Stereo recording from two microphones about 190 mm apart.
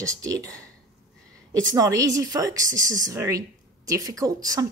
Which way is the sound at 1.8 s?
20° right (ahead or behind).